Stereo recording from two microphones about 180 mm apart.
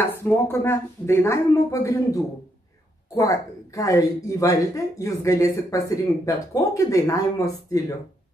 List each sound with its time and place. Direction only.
0.0 s speech: 15° left (ahead or behind)
3.2 s speech: 20° left (ahead or behind)